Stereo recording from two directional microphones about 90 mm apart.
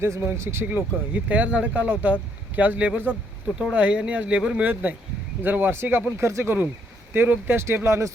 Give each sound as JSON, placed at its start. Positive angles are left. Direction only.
{"t": 0.0, "sound": "speech", "side_deg": -30}